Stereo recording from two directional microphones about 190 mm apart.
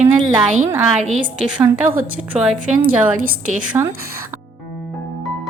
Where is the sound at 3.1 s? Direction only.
45° right (ahead or behind).